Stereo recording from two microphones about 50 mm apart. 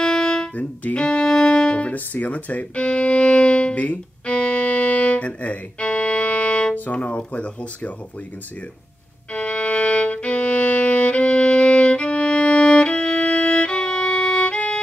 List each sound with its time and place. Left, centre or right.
0.0 s music: centre
2.0 s speech: left
2.7 s violin: left
4.4 s music: left
9.3 s violin: left